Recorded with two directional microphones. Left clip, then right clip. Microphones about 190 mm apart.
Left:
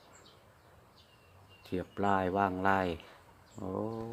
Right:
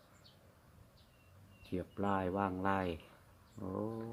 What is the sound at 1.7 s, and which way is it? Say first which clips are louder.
Speech: left 6 dB; 20° left (ahead or behind).